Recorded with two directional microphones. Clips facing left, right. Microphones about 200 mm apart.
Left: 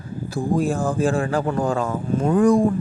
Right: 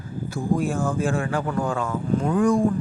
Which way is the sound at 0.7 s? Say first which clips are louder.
Left 3 dB; 35° left (ahead or behind).